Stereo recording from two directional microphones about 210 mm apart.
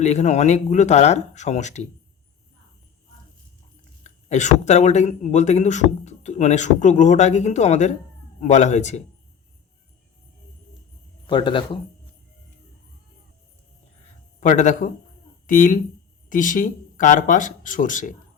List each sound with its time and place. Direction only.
0.0 s a man's voice: 35° left (ahead or behind)
4.0 s a man's voice: 35° left (ahead or behind)
11.3 s speech: 20° left (ahead or behind)
14.4 s a man's voice: 35° left (ahead or behind)